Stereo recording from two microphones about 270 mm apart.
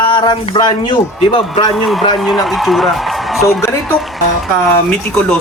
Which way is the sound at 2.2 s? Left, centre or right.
Centre.